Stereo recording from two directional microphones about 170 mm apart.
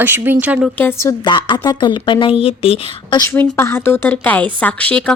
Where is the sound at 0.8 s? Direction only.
15° left (ahead or behind); by 3.2 s 35° left (ahead or behind).